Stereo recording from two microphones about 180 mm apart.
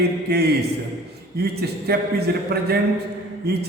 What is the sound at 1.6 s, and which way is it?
A man's voice, 65° right (ahead or behind).